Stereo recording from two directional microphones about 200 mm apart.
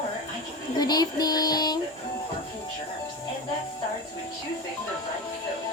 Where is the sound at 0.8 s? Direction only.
20° left (ahead or behind).